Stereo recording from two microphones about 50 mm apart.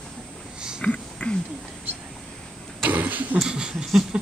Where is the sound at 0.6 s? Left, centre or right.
Centre.